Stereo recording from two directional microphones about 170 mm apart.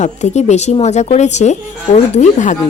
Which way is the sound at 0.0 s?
40° left (ahead or behind).